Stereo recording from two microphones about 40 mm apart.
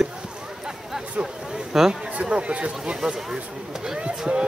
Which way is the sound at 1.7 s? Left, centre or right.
Centre.